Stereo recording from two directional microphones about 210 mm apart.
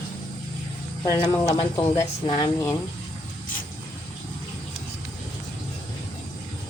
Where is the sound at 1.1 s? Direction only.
15° left (ahead or behind).